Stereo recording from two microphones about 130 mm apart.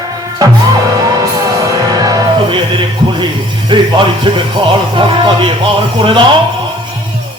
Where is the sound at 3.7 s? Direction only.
35° right (ahead or behind).